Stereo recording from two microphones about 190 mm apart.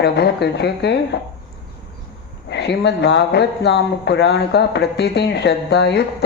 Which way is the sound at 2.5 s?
60° left (ahead or behind).